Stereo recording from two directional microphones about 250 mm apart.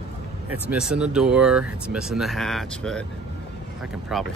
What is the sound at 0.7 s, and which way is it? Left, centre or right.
Speech, centre.